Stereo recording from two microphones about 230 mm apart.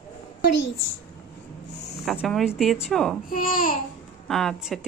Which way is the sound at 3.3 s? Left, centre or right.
Left.